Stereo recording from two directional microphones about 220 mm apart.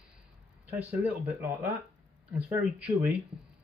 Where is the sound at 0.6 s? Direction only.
10° right (ahead or behind).